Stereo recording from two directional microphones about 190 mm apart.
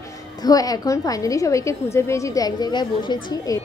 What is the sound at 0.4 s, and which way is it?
A woman's voice, 20° left (ahead or behind).